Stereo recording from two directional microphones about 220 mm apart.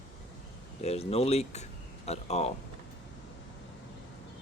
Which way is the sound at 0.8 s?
30° left (ahead or behind).